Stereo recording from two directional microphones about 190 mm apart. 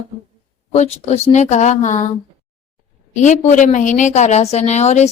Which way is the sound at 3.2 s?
40° left (ahead or behind).